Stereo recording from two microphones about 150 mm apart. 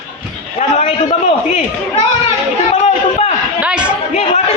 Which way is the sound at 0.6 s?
55° left (ahead or behind).